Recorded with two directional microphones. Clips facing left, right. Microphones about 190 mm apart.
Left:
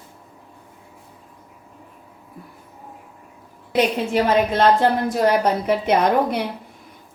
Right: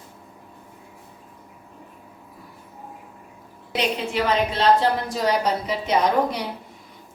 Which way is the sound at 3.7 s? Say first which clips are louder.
Left 5 dB; 50° left (ahead or behind).